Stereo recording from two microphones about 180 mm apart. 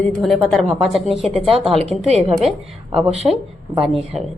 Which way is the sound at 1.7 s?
35° right (ahead or behind).